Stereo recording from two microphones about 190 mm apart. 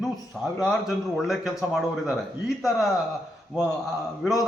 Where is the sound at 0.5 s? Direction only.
Centre (ahead or behind).